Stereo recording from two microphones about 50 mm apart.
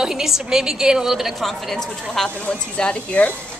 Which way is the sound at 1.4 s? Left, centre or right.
Centre.